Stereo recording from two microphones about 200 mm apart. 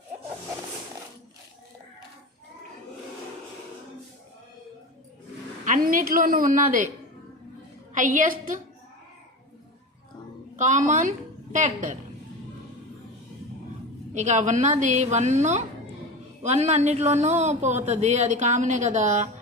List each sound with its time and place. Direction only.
5.6 s a woman's voice: 40° right (ahead or behind)
7.9 s a woman's voice: 40° right (ahead or behind)
10.6 s a woman's voice: 35° right (ahead or behind)
14.1 s a woman's voice: 35° right (ahead or behind)